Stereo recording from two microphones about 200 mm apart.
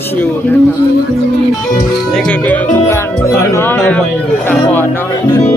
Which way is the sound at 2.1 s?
5° left (ahead or behind).